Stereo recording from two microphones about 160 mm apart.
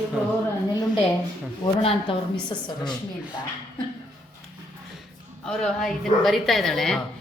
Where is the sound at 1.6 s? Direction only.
35° left (ahead or behind).